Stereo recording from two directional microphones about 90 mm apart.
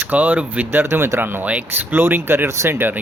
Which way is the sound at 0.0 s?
20° right (ahead or behind).